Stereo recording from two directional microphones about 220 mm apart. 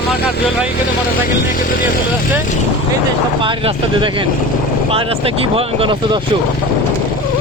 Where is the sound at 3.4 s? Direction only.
25° right (ahead or behind).